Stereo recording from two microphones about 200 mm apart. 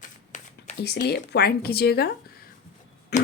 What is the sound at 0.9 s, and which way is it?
Speech, 50° left (ahead or behind).